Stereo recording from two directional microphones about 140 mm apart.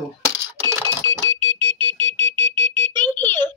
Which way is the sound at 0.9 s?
15° left (ahead or behind).